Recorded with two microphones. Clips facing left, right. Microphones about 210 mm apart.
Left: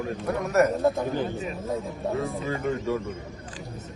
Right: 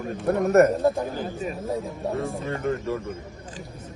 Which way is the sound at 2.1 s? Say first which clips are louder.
Left 1 dB; centre (ahead or behind).